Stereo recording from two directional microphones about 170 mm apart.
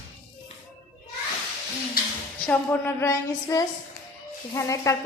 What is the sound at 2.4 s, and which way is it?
A woman's voice, 10° left (ahead or behind).